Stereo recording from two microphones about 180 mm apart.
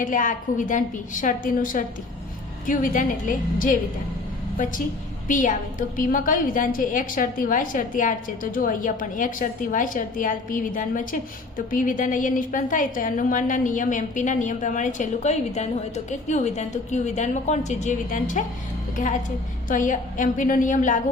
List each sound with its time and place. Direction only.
0.0 s a woman's voice: 45° left (ahead or behind)
19.6 s a woman's voice: 45° left (ahead or behind)